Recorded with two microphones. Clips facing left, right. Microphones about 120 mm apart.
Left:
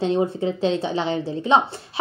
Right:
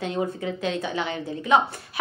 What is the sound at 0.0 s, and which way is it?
A woman's voice, 30° left (ahead or behind).